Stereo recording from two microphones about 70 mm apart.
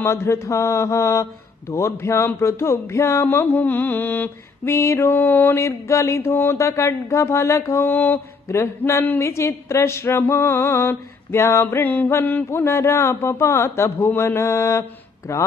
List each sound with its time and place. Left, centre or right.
0.0 s a man's voice: left
3.3 s mantra: left
4.7 s a man's voice: left
5.6 s speech: left
7.8 s mantra: left
8.5 s a man's voice: left
11.6 s mantra: left
12.4 s a man's voice: left